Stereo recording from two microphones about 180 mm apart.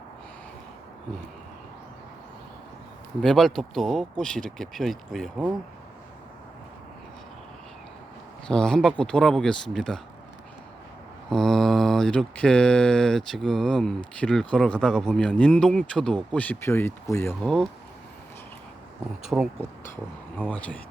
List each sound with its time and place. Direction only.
3.2 s mantra: centre (ahead or behind)
8.4 s mantra: 5° left (ahead or behind)
11.3 s mantra: centre (ahead or behind)
19.3 s speech: 10° right (ahead or behind)
20.4 s speech: 5° left (ahead or behind)